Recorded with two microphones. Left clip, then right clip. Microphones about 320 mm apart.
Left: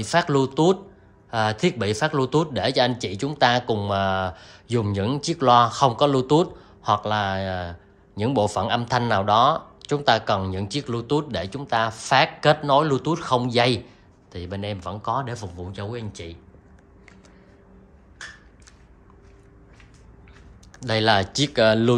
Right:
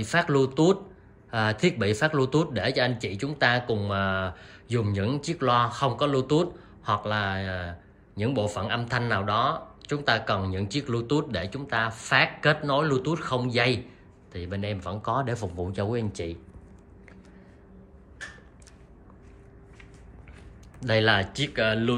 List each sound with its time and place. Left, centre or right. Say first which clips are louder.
0.0 s speech: left 3 dB; centre
20.8 s speech: left 3 dB; centre